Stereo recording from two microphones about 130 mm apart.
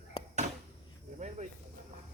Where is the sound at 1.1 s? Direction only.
65° right (ahead or behind).